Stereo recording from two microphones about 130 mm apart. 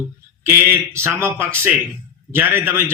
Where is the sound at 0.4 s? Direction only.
20° right (ahead or behind).